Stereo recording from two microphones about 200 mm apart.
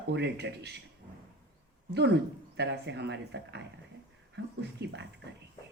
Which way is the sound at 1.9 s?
60° right (ahead or behind).